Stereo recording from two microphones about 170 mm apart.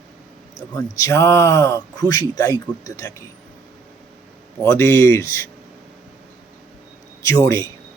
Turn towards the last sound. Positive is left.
turn(degrees=15)  # may be behind; listen again after turning